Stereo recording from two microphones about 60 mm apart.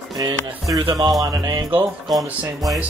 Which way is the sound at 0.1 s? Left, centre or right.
Right.